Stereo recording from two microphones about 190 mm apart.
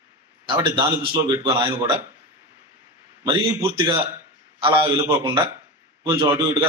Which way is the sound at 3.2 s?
25° right (ahead or behind).